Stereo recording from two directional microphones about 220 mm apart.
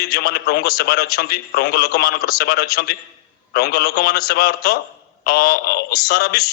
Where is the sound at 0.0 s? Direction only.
45° left (ahead or behind).